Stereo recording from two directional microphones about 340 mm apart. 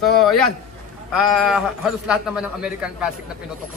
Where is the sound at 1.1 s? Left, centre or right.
Centre.